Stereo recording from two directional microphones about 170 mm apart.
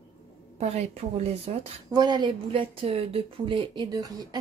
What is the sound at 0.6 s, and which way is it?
Speech, 40° right (ahead or behind).